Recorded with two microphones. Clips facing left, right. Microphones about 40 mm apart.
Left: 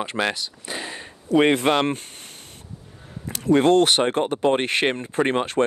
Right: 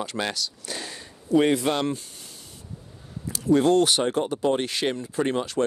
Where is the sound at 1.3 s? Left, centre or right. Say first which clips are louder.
Left 3 dB; left.